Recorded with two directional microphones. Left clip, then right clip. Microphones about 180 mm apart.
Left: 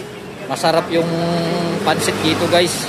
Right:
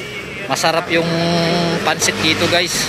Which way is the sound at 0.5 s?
5° left (ahead or behind).